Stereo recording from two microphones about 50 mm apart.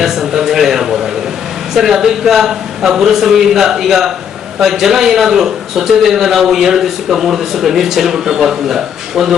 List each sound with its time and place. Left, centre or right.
0.0 s a man's voice: centre